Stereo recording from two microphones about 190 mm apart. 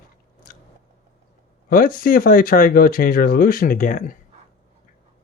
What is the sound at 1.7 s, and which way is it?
Speech, 50° left (ahead or behind).